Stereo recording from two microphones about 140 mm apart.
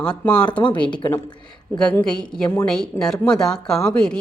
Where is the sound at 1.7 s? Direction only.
5° left (ahead or behind).